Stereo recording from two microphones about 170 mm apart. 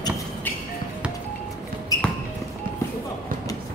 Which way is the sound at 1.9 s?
20° left (ahead or behind).